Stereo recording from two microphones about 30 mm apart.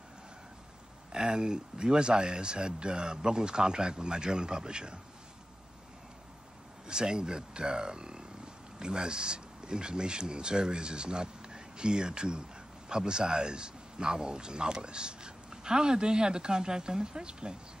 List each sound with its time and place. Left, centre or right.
1.1 s speech: right
6.9 s speech: right